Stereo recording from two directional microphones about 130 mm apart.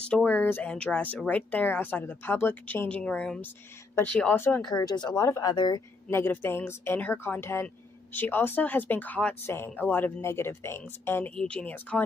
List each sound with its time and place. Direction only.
0.1 s speech: 10° left (ahead or behind)
4.6 s speech: 30° left (ahead or behind)
6.0 s speech: 20° left (ahead or behind)